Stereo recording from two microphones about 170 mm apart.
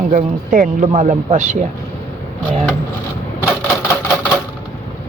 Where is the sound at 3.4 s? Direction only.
10° left (ahead or behind).